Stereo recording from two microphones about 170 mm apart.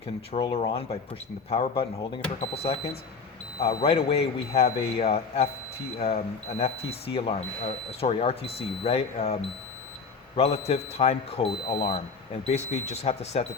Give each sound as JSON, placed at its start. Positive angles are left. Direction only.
{"t": 0.3, "sound": "speech", "side_deg": 35}